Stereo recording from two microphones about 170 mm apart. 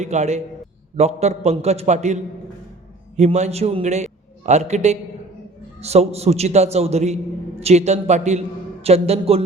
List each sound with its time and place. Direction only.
0.0 s a man's voice: 40° right (ahead or behind)